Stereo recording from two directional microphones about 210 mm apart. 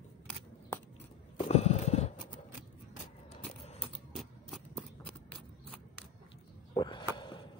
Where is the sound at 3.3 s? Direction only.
30° left (ahead or behind).